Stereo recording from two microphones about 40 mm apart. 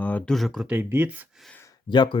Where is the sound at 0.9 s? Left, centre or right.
Right.